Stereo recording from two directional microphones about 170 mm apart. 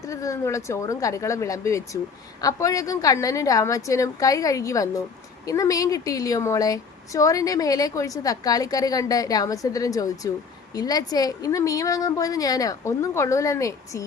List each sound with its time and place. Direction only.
0.0 s a woman's voice: 20° left (ahead or behind)